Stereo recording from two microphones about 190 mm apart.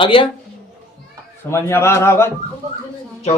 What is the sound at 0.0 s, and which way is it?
Speech, 25° left (ahead or behind).